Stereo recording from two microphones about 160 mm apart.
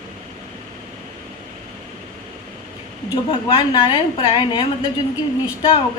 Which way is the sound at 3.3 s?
35° left (ahead or behind).